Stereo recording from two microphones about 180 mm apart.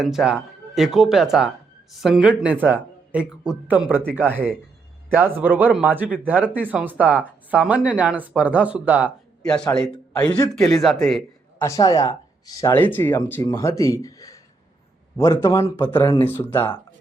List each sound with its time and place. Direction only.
0.0 s speech: centre (ahead or behind)
9.4 s a man's voice: 5° left (ahead or behind)
11.6 s speech: 20° left (ahead or behind)